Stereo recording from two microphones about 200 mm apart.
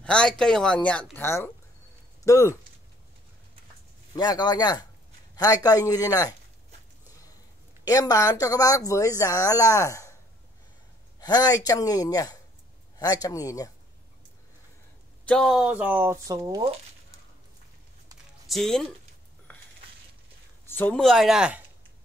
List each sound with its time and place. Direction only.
0.0 s speech: 5° left (ahead or behind)
4.1 s a man's voice: 20° left (ahead or behind)
7.8 s speech: 20° left (ahead or behind)
11.1 s a man's voice: 20° left (ahead or behind)
15.2 s speech: 5° left (ahead or behind); by 16.6 s 15° right (ahead or behind)
18.5 s speech: centre (ahead or behind)
20.6 s speech: 10° left (ahead or behind)